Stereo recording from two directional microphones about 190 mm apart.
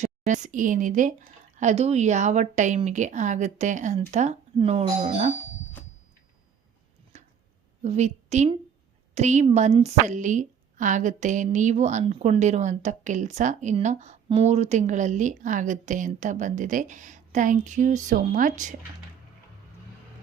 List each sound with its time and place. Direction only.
0.0 s a woman's voice: 40° right (ahead or behind)
7.1 s a sound: 35° right (ahead or behind)
7.8 s a woman's voice: 35° right (ahead or behind)